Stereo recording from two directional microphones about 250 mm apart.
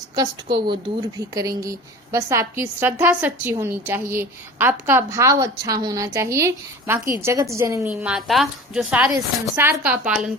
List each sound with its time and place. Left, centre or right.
0.2 s a woman's voice: centre